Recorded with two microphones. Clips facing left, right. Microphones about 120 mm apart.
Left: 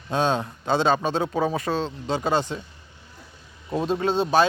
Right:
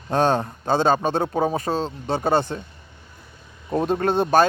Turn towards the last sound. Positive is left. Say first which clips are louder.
# right 2 dB
turn(degrees=-50)  # may be behind; listen again after turning